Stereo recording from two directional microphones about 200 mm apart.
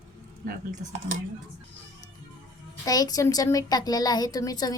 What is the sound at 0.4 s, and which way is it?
Speech, 40° right (ahead or behind).